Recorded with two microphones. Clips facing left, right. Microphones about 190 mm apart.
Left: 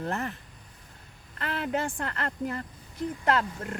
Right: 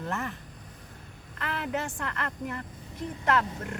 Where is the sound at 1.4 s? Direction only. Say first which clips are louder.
Left 2 dB; 30° left (ahead or behind).